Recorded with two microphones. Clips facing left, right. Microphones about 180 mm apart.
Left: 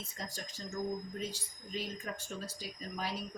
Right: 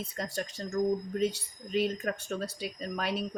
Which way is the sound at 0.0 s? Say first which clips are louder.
Right 9 dB; 65° right (ahead or behind).